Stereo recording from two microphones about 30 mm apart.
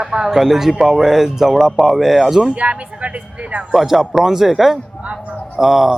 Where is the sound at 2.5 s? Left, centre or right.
Right.